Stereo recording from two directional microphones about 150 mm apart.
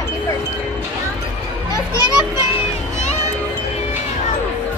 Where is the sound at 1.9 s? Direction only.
25° left (ahead or behind).